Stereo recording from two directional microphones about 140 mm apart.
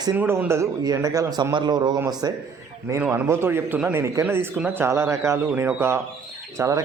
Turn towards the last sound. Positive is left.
turn(degrees=-25)  # may be behind; listen again after turning